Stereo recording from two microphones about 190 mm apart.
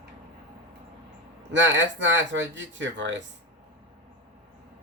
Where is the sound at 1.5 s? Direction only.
70° right (ahead or behind).